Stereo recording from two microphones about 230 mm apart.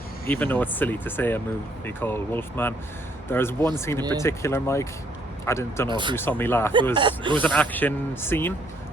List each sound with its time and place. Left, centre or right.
0.3 s a man's voice: centre
5.9 s speech: centre
6.1 s a man's voice: centre
6.9 s speech: right
7.3 s a man's voice: centre